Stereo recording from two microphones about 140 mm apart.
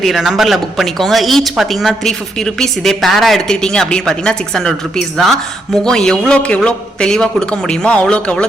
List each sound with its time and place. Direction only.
0.0 s speech: centre (ahead or behind)